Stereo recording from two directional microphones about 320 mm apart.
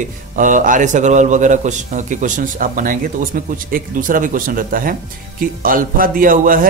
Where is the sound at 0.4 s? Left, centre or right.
Right.